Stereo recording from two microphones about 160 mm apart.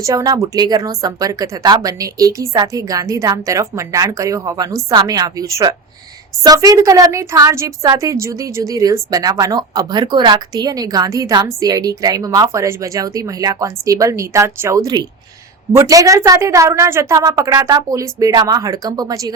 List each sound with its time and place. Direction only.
0.0 s a woman's voice: 25° right (ahead or behind)